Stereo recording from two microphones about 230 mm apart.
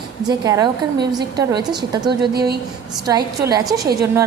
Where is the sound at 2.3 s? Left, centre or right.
Right.